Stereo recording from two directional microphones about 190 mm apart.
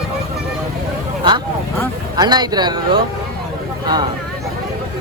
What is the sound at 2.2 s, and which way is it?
Speech, 20° right (ahead or behind).